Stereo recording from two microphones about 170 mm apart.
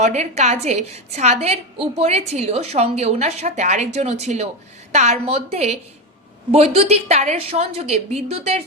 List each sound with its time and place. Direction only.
0.0 s a woman's voice: 40° right (ahead or behind)